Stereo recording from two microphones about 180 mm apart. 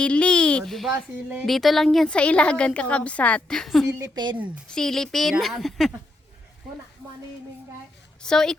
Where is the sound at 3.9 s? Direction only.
15° right (ahead or behind).